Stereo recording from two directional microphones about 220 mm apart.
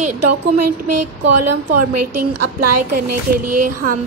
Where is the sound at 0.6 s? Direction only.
90° right.